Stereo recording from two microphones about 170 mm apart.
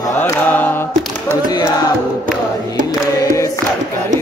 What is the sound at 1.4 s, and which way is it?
Music, 25° left (ahead or behind).